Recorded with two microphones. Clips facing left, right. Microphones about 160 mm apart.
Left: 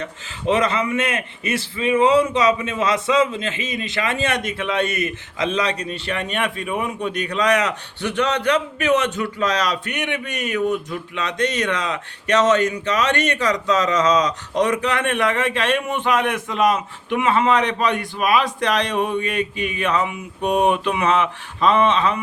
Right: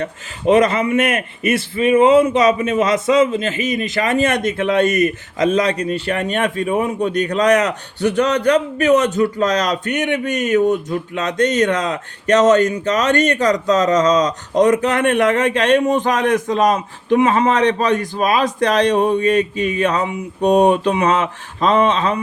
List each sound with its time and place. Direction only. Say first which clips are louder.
0.0 s a man's voice: right 6 dB; 40° right (ahead or behind)
1.4 s speech: right 8 dB; 30° left (ahead or behind)
1.7 s a man's voice: right 4 dB; 45° right (ahead or behind)
3.5 s speech: right 8 dB; 30° left (ahead or behind)
3.9 s a man's voice: right 4 dB; 40° right (ahead or behind)